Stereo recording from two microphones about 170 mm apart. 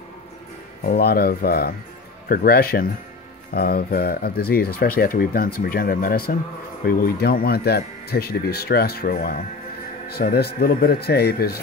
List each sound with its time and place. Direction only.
0.8 s speech: 65° left (ahead or behind)